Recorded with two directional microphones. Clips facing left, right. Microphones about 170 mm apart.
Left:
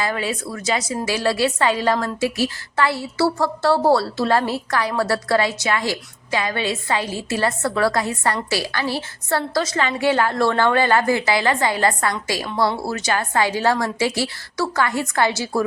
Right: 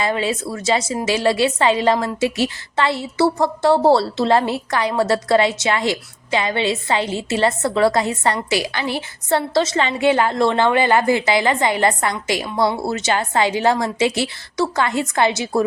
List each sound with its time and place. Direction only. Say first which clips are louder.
0.0 s a woman's voice: right 3 dB; 25° right (ahead or behind)